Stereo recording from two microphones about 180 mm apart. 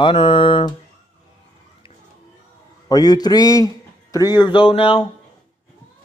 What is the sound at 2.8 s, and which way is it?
A man's voice, 20° left (ahead or behind).